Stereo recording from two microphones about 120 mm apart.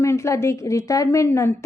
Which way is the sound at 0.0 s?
25° left (ahead or behind).